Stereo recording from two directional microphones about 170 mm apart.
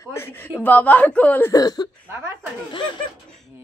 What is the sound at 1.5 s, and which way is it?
Speech, 20° left (ahead or behind).